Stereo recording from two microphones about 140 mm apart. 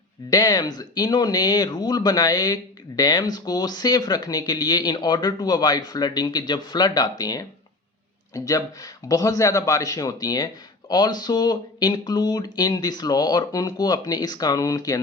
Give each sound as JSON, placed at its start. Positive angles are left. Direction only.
{"t": 0.3, "sound": "a man's voice", "side_deg": 30}